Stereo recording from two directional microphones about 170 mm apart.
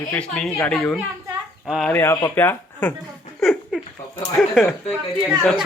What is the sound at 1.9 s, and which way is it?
Speech, 15° left (ahead or behind).